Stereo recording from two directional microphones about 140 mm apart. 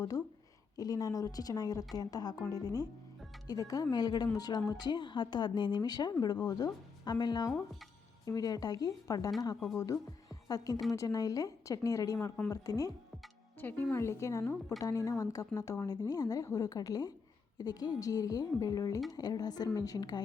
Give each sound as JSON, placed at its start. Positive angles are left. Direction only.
{"t": 0.8, "sound": "a woman's voice", "side_deg": 25}
{"t": 13.6, "sound": "a woman's voice", "side_deg": 15}